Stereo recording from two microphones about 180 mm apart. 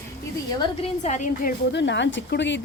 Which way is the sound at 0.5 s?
25° left (ahead or behind).